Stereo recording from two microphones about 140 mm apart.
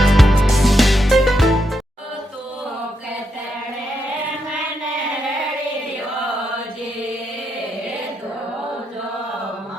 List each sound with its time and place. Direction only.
0.0 s music: centre (ahead or behind)